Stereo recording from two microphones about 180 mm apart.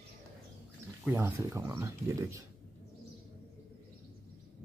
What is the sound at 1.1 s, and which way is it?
Speech, 15° right (ahead or behind).